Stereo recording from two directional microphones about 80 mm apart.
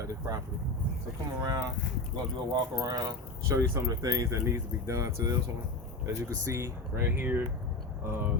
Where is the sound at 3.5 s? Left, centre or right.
Right.